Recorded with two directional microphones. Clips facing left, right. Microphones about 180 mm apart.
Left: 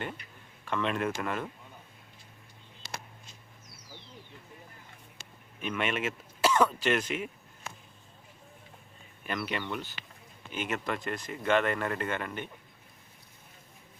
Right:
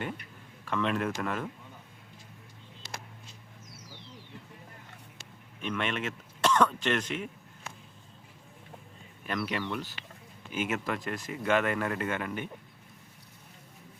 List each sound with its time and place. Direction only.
0.7 s speech: centre (ahead or behind)
5.6 s speech: 10° left (ahead or behind)
9.2 s speech: centre (ahead or behind)